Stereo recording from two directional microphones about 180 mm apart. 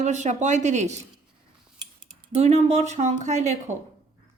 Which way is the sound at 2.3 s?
35° right (ahead or behind).